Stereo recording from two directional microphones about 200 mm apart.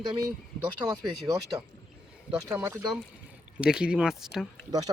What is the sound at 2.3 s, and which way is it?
Speech, 5° right (ahead or behind).